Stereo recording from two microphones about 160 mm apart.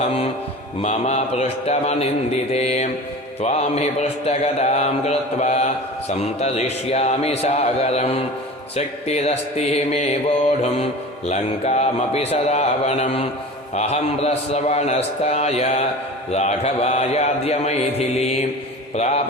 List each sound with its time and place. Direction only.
0.0 s speech: 40° left (ahead or behind)
0.8 s mantra: 45° left (ahead or behind)
11.3 s speech: 40° left (ahead or behind)
13.7 s mantra: 40° left (ahead or behind)